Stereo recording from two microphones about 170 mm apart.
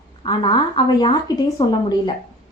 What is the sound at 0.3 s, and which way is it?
Speech, 30° left (ahead or behind).